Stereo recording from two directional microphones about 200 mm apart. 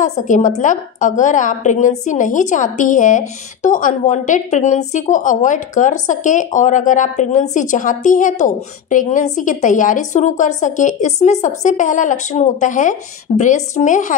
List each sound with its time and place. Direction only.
0.3 s a woman's voice: 40° left (ahead or behind)